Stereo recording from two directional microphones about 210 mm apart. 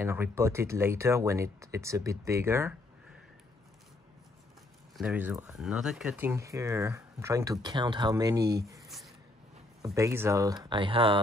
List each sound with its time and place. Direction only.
0.0 s speech: 10° right (ahead or behind)
4.9 s speech: 5° right (ahead or behind)
8.8 s a sound: centre (ahead or behind)
9.9 s speech: 15° right (ahead or behind)